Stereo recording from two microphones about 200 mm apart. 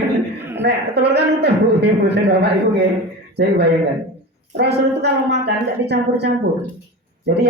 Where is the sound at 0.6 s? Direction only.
55° right (ahead or behind).